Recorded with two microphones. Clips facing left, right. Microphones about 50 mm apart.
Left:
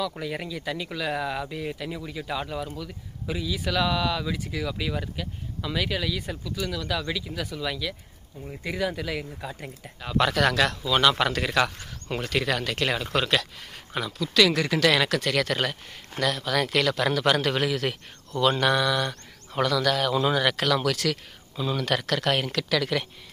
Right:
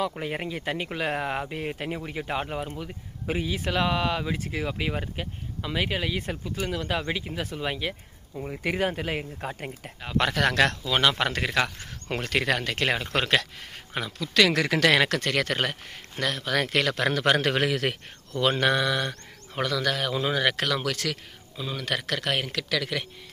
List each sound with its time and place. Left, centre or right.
0.2 s a man's voice: right
5.7 s mantra: right
6.2 s a man's voice: right
8.4 s a man's voice: right
9.8 s mantra: right
10.5 s speech: right
10.9 s mantra: right
12.1 s a man's voice: right
14.5 s speech: right
14.8 s a man's voice: right
18.4 s mantra: right
19.5 s speech: centre